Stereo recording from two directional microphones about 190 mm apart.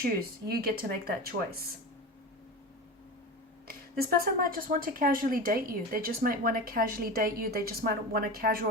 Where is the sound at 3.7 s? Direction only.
50° right (ahead or behind).